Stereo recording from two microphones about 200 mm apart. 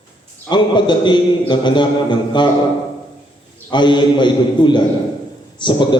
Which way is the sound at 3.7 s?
25° left (ahead or behind).